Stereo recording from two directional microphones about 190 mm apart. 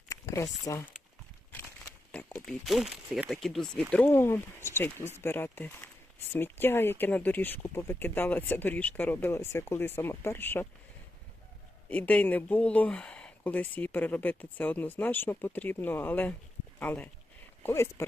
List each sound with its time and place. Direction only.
0.1 s speech: 15° left (ahead or behind)
2.1 s speech: 5° left (ahead or behind)
11.9 s speech: 10° left (ahead or behind)